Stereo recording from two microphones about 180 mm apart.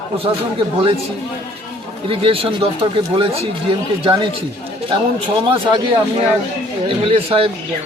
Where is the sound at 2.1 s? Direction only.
30° right (ahead or behind).